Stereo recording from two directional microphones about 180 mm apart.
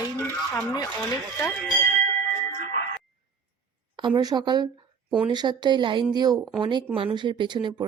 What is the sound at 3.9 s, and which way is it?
Speech, 25° right (ahead or behind).